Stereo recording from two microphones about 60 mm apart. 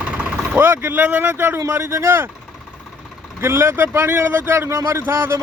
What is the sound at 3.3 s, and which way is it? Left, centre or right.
Speech, right.